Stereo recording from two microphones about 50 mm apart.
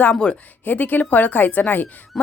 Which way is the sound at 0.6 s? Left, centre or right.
Left.